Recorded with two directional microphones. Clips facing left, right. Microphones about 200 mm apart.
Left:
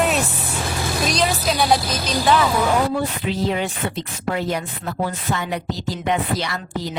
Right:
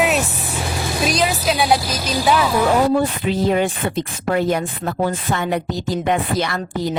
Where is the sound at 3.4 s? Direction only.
50° right (ahead or behind).